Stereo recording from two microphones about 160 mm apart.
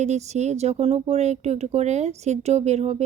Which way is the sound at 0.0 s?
45° right (ahead or behind).